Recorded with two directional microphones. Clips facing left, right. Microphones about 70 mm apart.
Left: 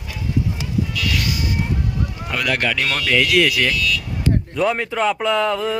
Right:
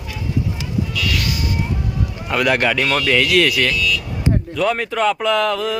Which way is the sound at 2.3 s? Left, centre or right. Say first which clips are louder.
Right 5 dB; centre.